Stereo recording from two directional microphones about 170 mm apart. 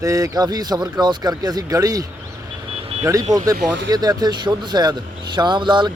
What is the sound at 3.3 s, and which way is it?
Speech, 20° right (ahead or behind).